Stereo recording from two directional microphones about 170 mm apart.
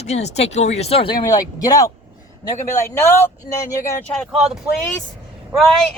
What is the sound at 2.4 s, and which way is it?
Speech, 15° left (ahead or behind).